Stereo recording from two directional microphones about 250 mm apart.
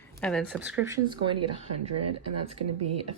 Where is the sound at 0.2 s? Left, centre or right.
Centre.